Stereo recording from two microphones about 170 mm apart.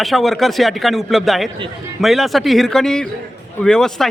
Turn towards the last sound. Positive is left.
turn(degrees=5)  # may be behind; listen again after turning